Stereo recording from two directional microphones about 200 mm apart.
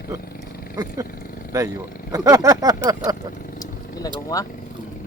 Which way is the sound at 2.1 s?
15° right (ahead or behind).